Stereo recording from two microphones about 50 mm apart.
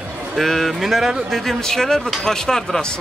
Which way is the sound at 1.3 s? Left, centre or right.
Centre.